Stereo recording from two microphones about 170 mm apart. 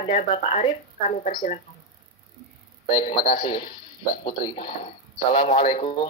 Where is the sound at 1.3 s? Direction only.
50° left (ahead or behind).